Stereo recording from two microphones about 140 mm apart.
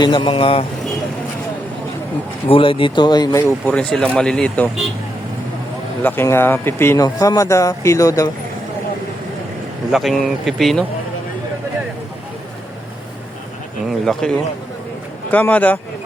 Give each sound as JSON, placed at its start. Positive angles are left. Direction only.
{"t": 0.0, "sound": "speech", "side_deg": 35}
{"t": 2.5, "sound": "speech", "side_deg": 40}
{"t": 3.4, "sound": "speech", "side_deg": 10}
{"t": 6.0, "sound": "speech", "side_deg": 15}
{"t": 9.9, "sound": "speech", "side_deg": 0}
{"t": 13.8, "sound": "a sound", "side_deg": 5}
{"t": 15.3, "sound": "speech", "side_deg": 10}